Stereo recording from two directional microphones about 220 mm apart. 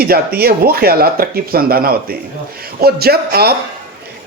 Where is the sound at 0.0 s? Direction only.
45° right (ahead or behind).